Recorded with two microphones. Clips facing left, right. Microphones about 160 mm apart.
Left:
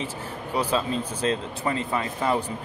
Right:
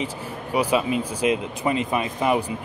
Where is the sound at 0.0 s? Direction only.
10° right (ahead or behind).